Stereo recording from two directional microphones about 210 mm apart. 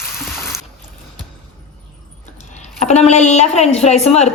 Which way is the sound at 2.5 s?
35° left (ahead or behind).